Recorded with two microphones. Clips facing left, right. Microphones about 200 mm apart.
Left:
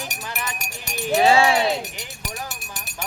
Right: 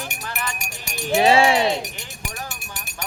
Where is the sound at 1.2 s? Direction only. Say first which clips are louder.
Right 1 dB; 25° right (ahead or behind).